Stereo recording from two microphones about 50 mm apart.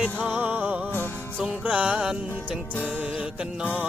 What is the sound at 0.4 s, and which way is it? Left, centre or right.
Music, right.